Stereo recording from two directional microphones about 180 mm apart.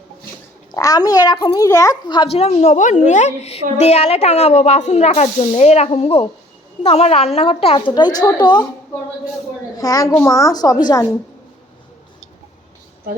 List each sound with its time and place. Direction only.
0.7 s a woman's voice: 20° left (ahead or behind)
9.7 s a woman's voice: 20° left (ahead or behind)